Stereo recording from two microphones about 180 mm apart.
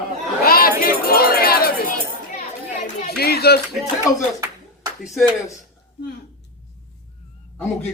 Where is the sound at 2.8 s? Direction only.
55° left (ahead or behind).